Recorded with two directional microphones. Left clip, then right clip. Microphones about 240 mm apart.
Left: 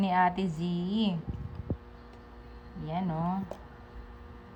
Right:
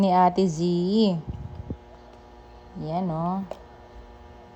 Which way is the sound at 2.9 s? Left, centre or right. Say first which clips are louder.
Right 6 dB; right.